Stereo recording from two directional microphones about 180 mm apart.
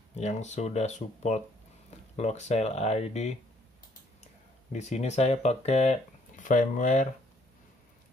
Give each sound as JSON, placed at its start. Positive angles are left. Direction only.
{"t": 0.1, "sound": "speech", "side_deg": 40}
{"t": 4.7, "sound": "speech", "side_deg": 40}